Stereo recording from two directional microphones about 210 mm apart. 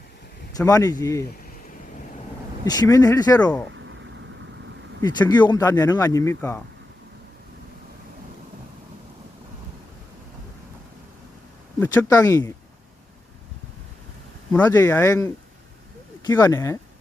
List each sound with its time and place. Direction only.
0.5 s speech: 15° left (ahead or behind)
2.6 s speech: 15° left (ahead or behind)
4.9 s speech: 20° left (ahead or behind)
11.8 s speech: 10° left (ahead or behind)
14.5 s speech: 10° left (ahead or behind)